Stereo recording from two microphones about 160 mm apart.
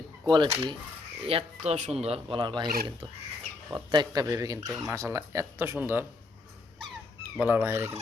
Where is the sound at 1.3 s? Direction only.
40° right (ahead or behind).